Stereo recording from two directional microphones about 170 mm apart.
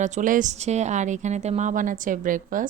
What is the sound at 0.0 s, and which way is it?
Speech, 45° right (ahead or behind).